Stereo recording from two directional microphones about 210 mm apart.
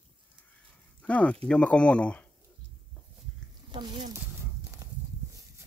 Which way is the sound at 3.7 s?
20° right (ahead or behind).